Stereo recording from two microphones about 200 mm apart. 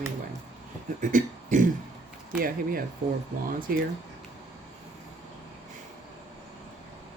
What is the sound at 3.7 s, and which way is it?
Speech, 50° right (ahead or behind).